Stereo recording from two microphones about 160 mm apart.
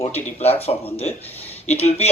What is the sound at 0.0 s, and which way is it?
Speech, 40° left (ahead or behind).